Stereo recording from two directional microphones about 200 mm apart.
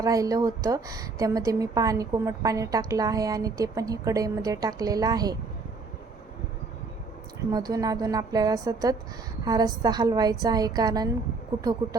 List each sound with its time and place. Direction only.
0.0 s a woman's voice: 15° right (ahead or behind)
7.5 s a woman's voice: 20° right (ahead or behind)